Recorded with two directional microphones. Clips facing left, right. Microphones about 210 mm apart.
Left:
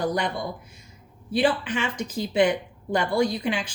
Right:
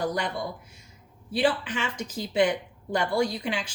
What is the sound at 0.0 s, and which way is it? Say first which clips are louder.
A woman's voice: left 3 dB; 20° left (ahead or behind).